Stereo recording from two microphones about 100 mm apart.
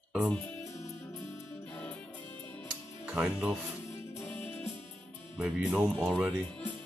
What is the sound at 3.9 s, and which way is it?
Music, 20° left (ahead or behind).